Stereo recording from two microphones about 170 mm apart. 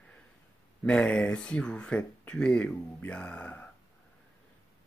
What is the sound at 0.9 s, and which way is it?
Speech, 5° left (ahead or behind).